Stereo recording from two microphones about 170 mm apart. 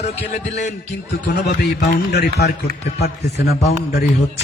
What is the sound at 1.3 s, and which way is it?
Speech, 75° left (ahead or behind).